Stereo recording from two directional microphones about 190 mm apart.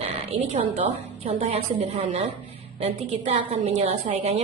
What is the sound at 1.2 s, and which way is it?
A woman's voice, 35° right (ahead or behind).